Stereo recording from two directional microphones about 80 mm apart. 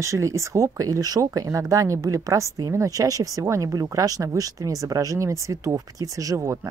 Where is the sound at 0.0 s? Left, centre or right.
Right.